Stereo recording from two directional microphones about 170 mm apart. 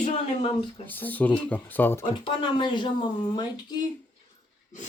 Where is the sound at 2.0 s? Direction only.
30° left (ahead or behind).